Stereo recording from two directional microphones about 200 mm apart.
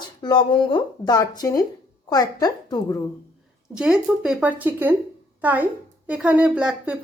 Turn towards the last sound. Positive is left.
turn(degrees=-5)  # may be behind; listen again after turning